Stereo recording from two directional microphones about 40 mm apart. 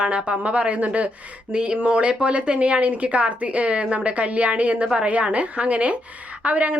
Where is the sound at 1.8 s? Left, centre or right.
Right.